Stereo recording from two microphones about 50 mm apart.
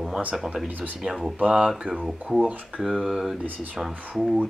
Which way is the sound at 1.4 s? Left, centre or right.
Centre.